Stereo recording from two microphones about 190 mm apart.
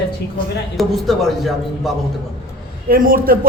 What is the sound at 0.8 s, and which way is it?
A man's voice, centre (ahead or behind).